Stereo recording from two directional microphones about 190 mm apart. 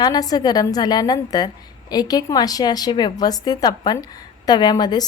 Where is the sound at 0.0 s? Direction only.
20° left (ahead or behind).